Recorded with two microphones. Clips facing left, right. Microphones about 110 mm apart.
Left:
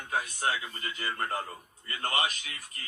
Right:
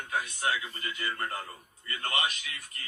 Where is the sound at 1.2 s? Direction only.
25° left (ahead or behind).